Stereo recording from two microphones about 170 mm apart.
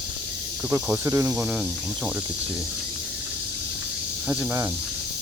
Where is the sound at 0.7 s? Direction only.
15° right (ahead or behind).